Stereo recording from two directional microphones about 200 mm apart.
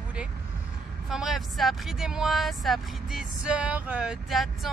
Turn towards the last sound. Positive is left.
turn(degrees=0)  # may be behind; listen again after turning